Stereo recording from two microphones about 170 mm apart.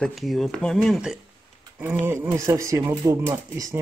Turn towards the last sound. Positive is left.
turn(degrees=-15)  # may be behind; listen again after turning